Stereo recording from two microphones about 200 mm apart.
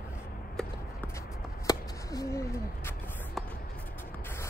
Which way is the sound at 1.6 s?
20° left (ahead or behind).